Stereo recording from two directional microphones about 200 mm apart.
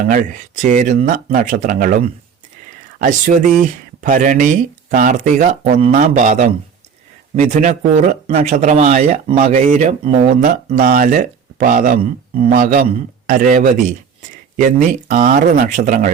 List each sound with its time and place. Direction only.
0.1 s a man's voice: 40° right (ahead or behind)